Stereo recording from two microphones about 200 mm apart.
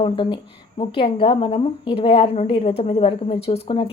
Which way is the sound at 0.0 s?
25° left (ahead or behind).